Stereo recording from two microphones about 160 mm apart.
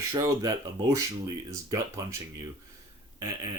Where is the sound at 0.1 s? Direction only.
20° right (ahead or behind).